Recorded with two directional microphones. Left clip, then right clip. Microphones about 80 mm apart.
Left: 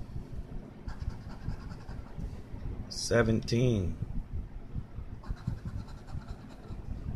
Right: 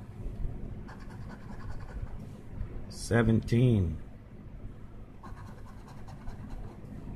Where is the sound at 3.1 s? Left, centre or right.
Right.